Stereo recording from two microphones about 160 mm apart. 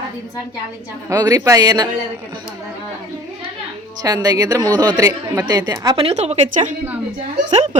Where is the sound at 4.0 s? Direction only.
25° right (ahead or behind).